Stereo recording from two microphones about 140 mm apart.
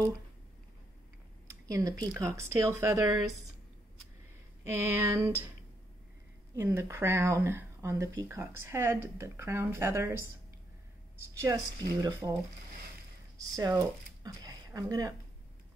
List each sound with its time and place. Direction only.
1.7 s speech: 25° right (ahead or behind)
4.6 s a sound: 15° right (ahead or behind)
6.5 s speech: 20° right (ahead or behind)
11.4 s speech: 25° right (ahead or behind)
13.4 s speech: 25° right (ahead or behind)
14.2 s a sound: 25° right (ahead or behind)